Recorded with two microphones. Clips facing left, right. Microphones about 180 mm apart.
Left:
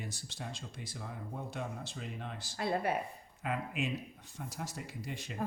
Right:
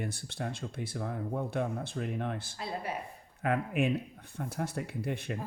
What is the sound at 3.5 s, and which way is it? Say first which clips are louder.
Speech: right 7 dB; 55° right (ahead or behind).